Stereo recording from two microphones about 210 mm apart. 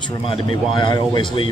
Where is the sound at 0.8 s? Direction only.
20° left (ahead or behind).